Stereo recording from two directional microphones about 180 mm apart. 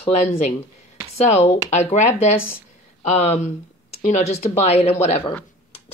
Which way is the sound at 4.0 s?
40° left (ahead or behind).